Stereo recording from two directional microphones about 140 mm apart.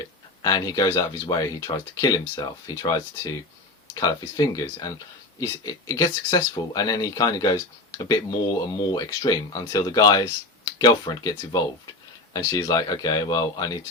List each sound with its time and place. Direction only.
0.0 s speech: 30° left (ahead or behind)